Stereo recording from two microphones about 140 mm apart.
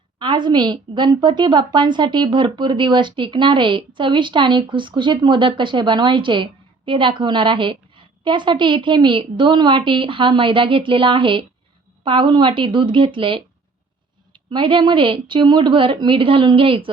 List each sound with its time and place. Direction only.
0.2 s a woman's voice: 35° right (ahead or behind)